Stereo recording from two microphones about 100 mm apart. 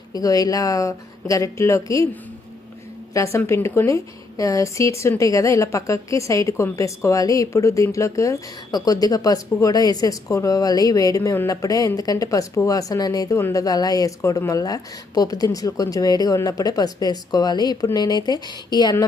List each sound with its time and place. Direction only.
0.1 s speech: 35° left (ahead or behind)
3.2 s speech: 30° left (ahead or behind); by 19.0 s 45° left (ahead or behind)